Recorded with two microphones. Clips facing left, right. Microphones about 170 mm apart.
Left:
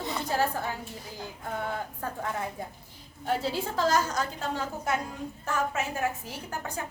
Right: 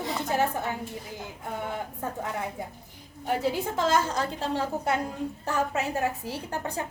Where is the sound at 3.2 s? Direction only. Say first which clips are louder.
Right 2 dB; 15° right (ahead or behind).